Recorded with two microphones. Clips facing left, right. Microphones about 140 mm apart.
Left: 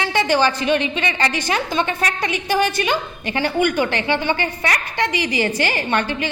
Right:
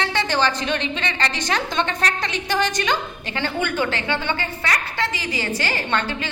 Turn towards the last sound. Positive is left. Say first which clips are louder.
# left 3 dB
turn(degrees=15)  # may be behind; listen again after turning